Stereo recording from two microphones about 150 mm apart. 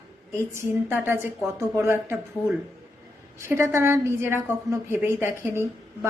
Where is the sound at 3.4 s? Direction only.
15° right (ahead or behind).